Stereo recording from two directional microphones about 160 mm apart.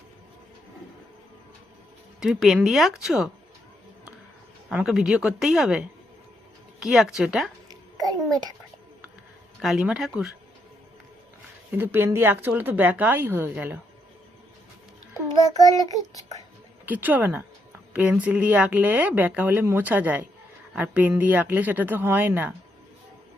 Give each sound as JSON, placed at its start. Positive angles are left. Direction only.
{"t": 2.2, "sound": "speech", "side_deg": -5}
{"t": 4.7, "sound": "speech", "side_deg": -5}
{"t": 7.7, "sound": "babbling", "side_deg": -25}
{"t": 9.6, "sound": "speech", "side_deg": 0}
{"t": 11.8, "sound": "a woman's voice", "side_deg": -15}
{"t": 15.6, "sound": "child singing", "side_deg": 20}
{"t": 16.8, "sound": "a woman's voice", "side_deg": -10}